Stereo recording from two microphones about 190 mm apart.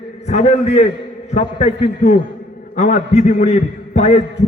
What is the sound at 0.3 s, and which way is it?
A man's voice, 35° left (ahead or behind).